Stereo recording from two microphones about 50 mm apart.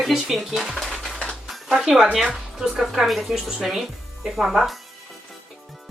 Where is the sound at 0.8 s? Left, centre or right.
Centre.